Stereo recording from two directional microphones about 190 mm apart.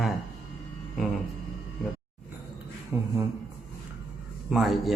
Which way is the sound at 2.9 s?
15° right (ahead or behind).